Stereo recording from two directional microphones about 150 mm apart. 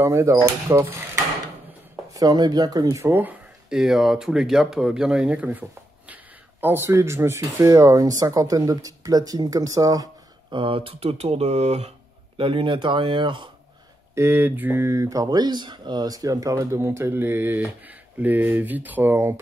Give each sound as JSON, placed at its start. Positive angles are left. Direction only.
{"t": 0.0, "sound": "speech", "side_deg": -20}
{"t": 10.5, "sound": "speech", "side_deg": -35}
{"t": 12.4, "sound": "speech", "side_deg": -35}
{"t": 14.1, "sound": "speech", "side_deg": -15}